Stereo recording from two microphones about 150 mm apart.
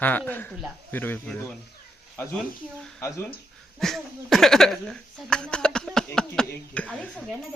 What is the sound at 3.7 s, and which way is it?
Speech, centre (ahead or behind).